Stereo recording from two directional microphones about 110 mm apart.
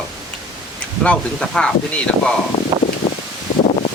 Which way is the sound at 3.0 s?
60° left (ahead or behind).